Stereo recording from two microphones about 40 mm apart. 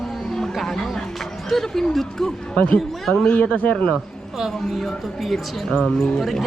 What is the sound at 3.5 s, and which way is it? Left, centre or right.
Speech, left.